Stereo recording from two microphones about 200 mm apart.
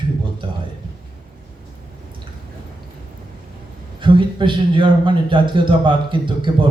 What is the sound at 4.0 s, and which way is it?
A man's voice, 25° right (ahead or behind).